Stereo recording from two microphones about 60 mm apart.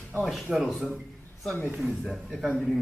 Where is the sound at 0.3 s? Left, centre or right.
Centre.